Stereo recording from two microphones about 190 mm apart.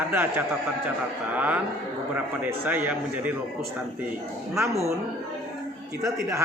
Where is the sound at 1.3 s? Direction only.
10° right (ahead or behind).